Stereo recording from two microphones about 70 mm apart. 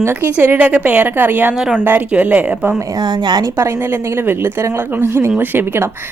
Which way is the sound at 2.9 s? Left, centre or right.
Right.